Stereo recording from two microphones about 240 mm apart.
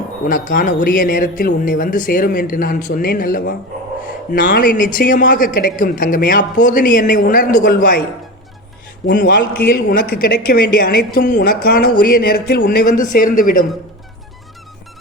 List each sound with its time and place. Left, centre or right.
0.3 s a man's voice: left
9.0 s a man's voice: left